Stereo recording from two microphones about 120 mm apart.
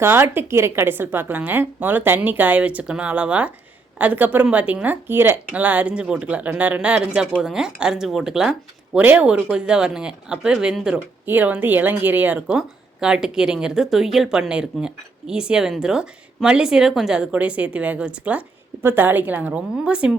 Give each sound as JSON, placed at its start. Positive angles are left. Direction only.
{"t": 0.0, "sound": "a woman's voice", "side_deg": -20}